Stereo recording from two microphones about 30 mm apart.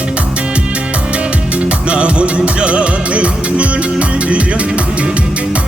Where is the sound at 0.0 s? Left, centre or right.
Right.